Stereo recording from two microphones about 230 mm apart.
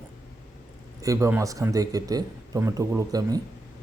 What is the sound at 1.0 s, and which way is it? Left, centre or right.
A man's voice, centre.